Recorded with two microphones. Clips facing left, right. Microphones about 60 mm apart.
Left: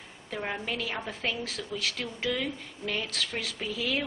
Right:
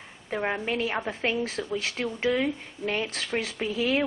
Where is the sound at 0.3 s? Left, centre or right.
Right.